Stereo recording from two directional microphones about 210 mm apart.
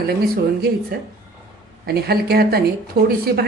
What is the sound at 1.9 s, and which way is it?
Speech, 50° right (ahead or behind).